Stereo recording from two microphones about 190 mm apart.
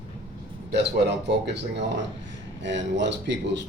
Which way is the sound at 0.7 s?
65° right (ahead or behind).